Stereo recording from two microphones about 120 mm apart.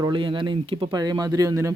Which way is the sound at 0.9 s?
35° right (ahead or behind).